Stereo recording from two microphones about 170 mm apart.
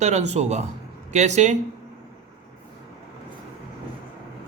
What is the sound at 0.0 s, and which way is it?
A man's voice, 40° right (ahead or behind).